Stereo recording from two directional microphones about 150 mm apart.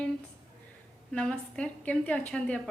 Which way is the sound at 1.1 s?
5° left (ahead or behind).